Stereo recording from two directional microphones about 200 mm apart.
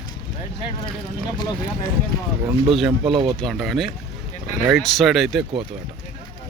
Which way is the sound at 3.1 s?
25° right (ahead or behind).